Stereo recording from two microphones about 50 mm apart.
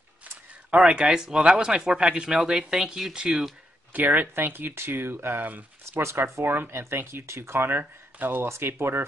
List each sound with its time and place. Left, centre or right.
0.7 s speech: right
3.9 s speech: right
6.4 s speech: right
7.2 s speech: right
8.5 s speech: right